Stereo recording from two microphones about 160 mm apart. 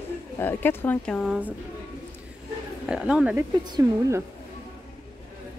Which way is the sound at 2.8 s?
5° right (ahead or behind).